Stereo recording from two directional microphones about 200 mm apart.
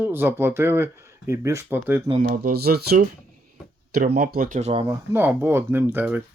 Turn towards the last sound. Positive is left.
turn(degrees=-10)  # may be behind; listen again after turning